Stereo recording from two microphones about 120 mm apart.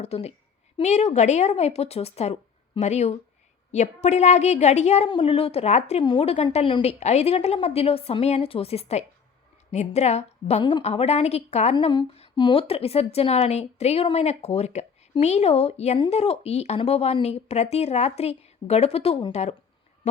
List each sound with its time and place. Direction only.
0.0 s a woman's voice: 60° left (ahead or behind)
5.0 s speech: 50° left (ahead or behind); by 6.0 s 65° left (ahead or behind)
6.0 s speech: 50° left (ahead or behind)
10.6 s a woman's voice: 40° left (ahead or behind)
10.8 s speech: 60° left (ahead or behind)
12.4 s speech: 45° left (ahead or behind); by 19.5 s 65° left (ahead or behind)